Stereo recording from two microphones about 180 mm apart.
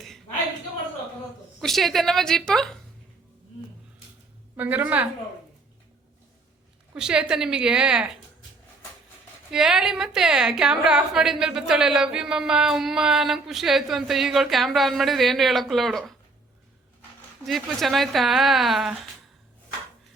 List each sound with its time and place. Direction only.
1.6 s a woman's voice: centre (ahead or behind)
4.5 s a woman's voice: 10° right (ahead or behind)
6.9 s a woman's voice: 5° right (ahead or behind)
9.5 s a woman's voice: 5° right (ahead or behind)
17.4 s a woman's voice: centre (ahead or behind)